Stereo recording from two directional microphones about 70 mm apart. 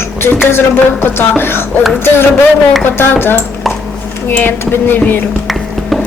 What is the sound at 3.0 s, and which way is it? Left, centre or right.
Speech, left.